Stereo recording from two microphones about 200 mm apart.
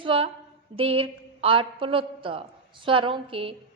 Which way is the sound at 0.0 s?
25° right (ahead or behind).